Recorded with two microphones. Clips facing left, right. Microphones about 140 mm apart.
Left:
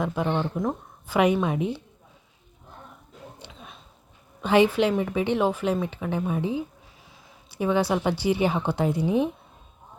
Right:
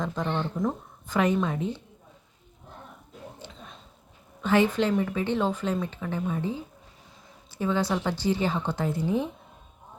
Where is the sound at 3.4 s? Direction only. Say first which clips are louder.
Even; 10° left (ahead or behind).